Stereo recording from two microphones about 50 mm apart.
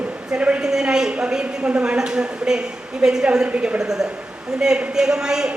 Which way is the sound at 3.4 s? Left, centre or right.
Right.